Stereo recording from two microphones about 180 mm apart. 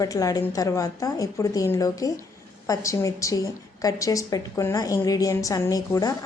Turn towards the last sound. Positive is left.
turn(degrees=20)  # may be behind; listen again after turning